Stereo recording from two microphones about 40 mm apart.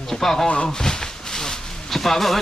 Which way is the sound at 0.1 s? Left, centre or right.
Centre.